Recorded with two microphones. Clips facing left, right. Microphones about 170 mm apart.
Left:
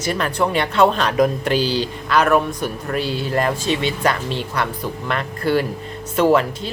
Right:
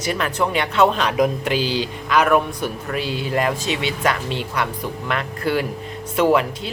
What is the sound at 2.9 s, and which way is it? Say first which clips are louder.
Speech: left 4 dB; 40° left (ahead or behind).